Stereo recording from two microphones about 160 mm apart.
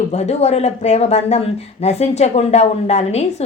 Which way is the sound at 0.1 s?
40° left (ahead or behind).